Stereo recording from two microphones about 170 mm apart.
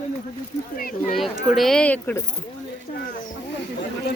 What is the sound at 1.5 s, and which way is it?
Speech, centre (ahead or behind).